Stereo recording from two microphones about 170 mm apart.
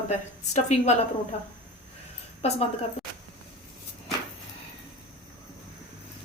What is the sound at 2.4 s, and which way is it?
Speech, 35° left (ahead or behind).